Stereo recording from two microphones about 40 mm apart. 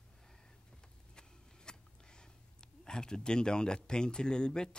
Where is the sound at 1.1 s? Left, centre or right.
Centre.